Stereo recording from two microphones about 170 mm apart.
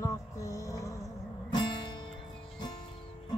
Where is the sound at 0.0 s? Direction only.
20° left (ahead or behind).